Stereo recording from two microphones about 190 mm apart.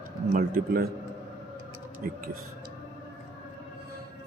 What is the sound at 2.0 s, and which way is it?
Speech, 45° right (ahead or behind).